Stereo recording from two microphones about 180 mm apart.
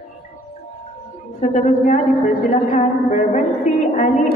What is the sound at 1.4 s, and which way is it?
A woman's voice, 40° left (ahead or behind).